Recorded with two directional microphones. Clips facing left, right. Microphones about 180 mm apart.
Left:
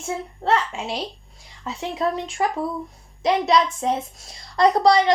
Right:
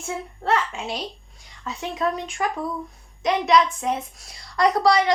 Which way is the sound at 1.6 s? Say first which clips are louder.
Left 1 dB; 25° left (ahead or behind).